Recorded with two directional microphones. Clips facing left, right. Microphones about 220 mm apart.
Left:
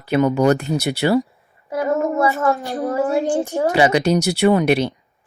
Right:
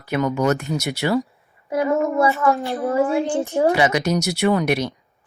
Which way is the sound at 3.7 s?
30° left (ahead or behind).